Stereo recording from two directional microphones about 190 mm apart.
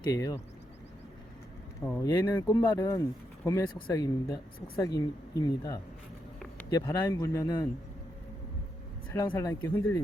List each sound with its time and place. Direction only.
0.1 s speech: 20° left (ahead or behind)
1.8 s speech: 10° left (ahead or behind)
9.1 s speech: 15° left (ahead or behind)